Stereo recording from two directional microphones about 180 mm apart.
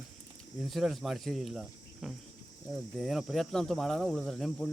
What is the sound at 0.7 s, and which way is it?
Speech, centre (ahead or behind).